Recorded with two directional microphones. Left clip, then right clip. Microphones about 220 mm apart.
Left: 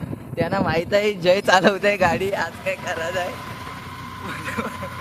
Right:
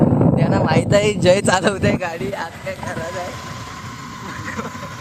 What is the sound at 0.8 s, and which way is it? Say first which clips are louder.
Speech: right 3 dB; 20° right (ahead or behind).